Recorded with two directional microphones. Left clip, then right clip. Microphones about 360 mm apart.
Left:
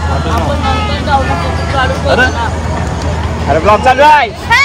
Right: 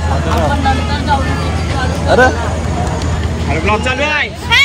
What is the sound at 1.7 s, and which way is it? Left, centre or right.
Music, centre.